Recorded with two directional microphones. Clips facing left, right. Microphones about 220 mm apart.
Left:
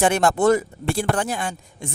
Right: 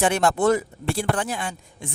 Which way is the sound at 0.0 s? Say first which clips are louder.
Left 2 dB; 45° left (ahead or behind).